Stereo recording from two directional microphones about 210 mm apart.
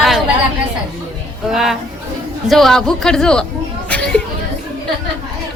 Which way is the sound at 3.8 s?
5° left (ahead or behind).